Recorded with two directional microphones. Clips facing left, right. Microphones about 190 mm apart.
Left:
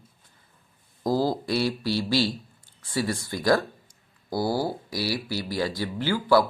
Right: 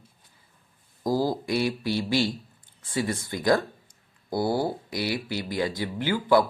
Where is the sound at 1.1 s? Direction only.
15° right (ahead or behind).